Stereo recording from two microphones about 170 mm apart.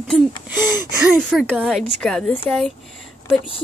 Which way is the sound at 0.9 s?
5° right (ahead or behind).